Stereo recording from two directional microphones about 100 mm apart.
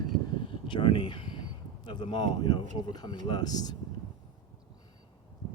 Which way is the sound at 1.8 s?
50° left (ahead or behind).